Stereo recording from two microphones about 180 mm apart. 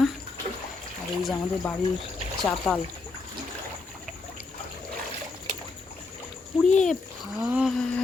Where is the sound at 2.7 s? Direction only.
Centre (ahead or behind).